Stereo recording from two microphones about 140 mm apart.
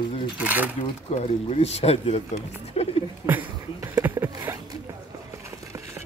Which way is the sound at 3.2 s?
15° right (ahead or behind).